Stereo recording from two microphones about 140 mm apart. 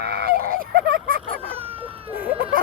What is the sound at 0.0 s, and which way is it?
Fowl, 90° right.